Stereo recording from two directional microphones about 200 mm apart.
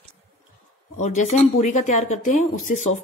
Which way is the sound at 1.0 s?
35° left (ahead or behind).